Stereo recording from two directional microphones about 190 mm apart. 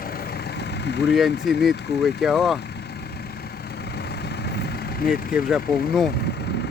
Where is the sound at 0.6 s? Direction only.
60° left (ahead or behind).